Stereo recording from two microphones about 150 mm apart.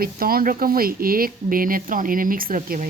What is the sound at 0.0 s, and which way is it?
Speech, 80° right.